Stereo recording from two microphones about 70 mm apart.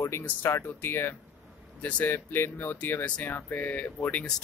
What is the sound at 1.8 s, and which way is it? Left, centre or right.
Speech, centre.